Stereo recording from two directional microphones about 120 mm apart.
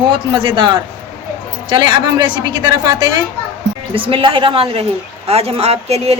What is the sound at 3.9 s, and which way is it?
A woman's voice, 50° right (ahead or behind).